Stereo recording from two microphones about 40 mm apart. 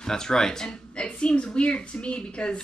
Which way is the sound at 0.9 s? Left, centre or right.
Left.